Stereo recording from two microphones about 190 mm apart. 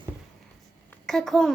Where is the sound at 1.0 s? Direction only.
Centre (ahead or behind).